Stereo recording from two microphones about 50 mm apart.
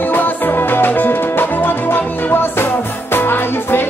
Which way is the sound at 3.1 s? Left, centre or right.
Left.